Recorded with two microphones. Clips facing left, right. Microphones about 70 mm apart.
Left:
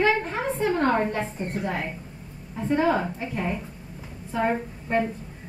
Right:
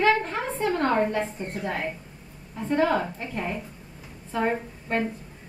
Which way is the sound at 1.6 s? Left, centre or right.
Centre.